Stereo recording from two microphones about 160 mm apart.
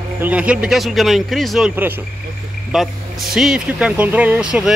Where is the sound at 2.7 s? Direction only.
Centre (ahead or behind).